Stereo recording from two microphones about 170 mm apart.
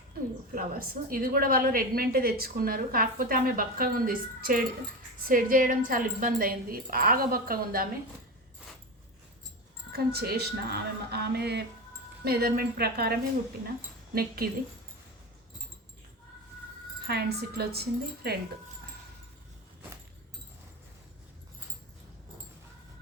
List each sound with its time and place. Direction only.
0.5 s a woman's voice: 60° right (ahead or behind)
9.9 s a woman's voice: 65° right (ahead or behind)
17.1 s speech: 70° right (ahead or behind)